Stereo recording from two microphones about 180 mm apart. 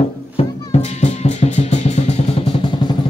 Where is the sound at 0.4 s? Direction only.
35° left (ahead or behind).